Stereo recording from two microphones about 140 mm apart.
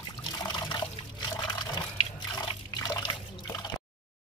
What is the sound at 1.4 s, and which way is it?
Liquid, 30° left (ahead or behind).